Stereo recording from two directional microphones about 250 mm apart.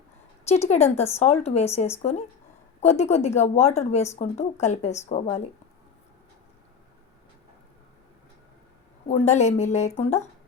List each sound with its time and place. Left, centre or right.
0.4 s a woman's voice: left
9.0 s a woman's voice: left